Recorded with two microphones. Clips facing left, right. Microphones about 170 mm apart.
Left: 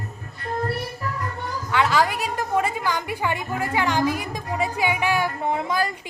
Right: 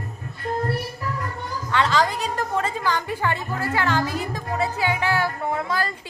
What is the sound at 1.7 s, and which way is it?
A woman's voice, 10° left (ahead or behind).